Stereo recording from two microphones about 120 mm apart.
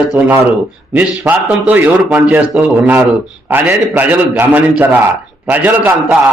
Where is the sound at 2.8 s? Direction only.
15° right (ahead or behind).